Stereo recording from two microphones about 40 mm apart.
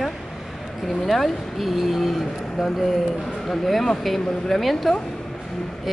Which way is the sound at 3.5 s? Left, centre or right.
Centre.